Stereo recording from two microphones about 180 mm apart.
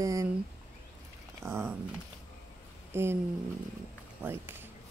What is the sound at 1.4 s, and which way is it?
Speech, 15° right (ahead or behind).